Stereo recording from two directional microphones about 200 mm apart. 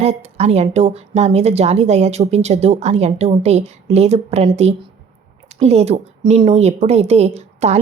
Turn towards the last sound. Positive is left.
turn(degrees=-35)  # may be behind; listen again after turning